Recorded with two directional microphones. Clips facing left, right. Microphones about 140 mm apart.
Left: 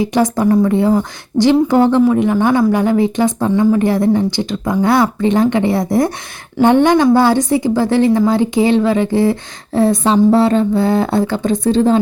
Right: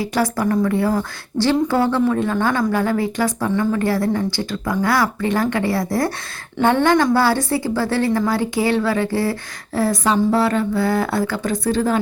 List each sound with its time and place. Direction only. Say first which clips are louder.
0.0 s speech: left 6 dB; 20° left (ahead or behind)